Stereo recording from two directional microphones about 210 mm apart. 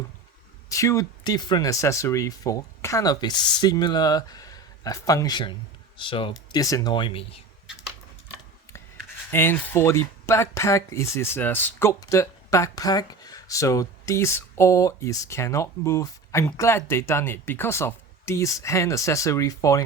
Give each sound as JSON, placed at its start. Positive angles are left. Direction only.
{"t": 0.7, "sound": "speech", "side_deg": 15}
{"t": 9.3, "sound": "speech", "side_deg": 10}